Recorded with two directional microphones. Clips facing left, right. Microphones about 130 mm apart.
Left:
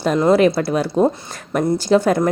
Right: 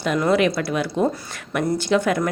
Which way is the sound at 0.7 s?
35° left (ahead or behind).